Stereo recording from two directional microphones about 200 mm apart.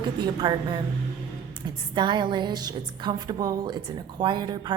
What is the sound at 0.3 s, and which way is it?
Speech, 20° right (ahead or behind).